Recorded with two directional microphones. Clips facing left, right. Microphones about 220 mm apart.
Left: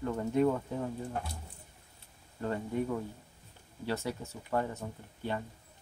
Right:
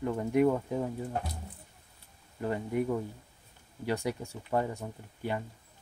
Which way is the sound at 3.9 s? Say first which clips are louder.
Right 3 dB; 15° right (ahead or behind).